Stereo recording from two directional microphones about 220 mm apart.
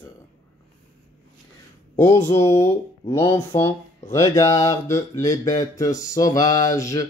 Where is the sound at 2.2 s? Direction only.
10° left (ahead or behind).